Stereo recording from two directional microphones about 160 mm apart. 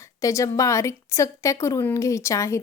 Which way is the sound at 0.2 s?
20° left (ahead or behind).